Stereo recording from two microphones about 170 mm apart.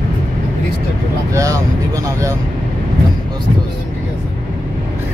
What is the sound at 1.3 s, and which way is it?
Vehicle, 20° right (ahead or behind).